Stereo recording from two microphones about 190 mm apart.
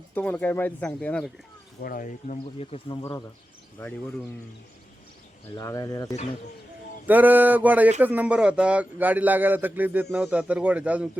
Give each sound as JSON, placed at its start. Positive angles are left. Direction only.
{"t": 0.1, "sound": "speech", "side_deg": 10}
{"t": 1.8, "sound": "speech", "side_deg": 45}
{"t": 5.5, "sound": "speech", "side_deg": 15}
{"t": 7.1, "sound": "a man's voice", "side_deg": -10}